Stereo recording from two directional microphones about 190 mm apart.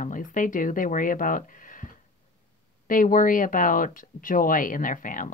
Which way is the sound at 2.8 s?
45° left (ahead or behind).